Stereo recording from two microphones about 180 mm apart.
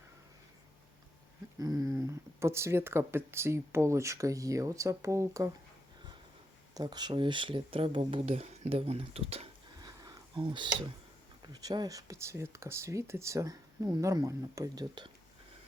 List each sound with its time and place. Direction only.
1.5 s speech: 20° right (ahead or behind)
6.7 s speech: 25° right (ahead or behind)
9.7 s a sound: 20° right (ahead or behind)
11.4 s speech: 25° right (ahead or behind)